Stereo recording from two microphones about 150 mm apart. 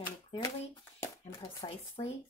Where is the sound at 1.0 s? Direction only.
20° left (ahead or behind).